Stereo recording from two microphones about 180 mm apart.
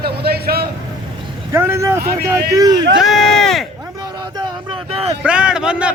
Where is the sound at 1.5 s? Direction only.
15° right (ahead or behind).